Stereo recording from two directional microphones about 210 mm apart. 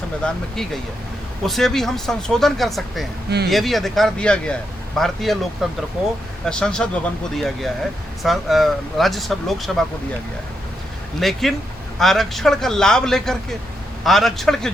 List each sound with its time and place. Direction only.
0.2 s speech: 5° left (ahead or behind)
3.2 s speech: 50° right (ahead or behind)
3.5 s speech: centre (ahead or behind)
11.2 s speech: centre (ahead or behind)